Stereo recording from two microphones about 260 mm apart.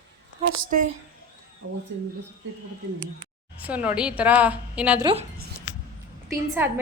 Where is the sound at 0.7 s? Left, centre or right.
Right.